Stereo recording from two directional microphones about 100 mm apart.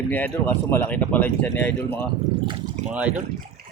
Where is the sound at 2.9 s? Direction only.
15° right (ahead or behind).